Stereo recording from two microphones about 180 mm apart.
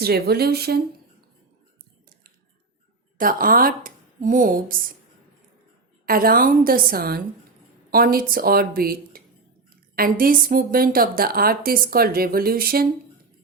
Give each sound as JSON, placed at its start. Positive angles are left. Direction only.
{"t": 0.0, "sound": "a woman's voice", "side_deg": -60}
{"t": 3.2, "sound": "a woman's voice", "side_deg": -50}
{"t": 6.1, "sound": "a woman's voice", "side_deg": -55}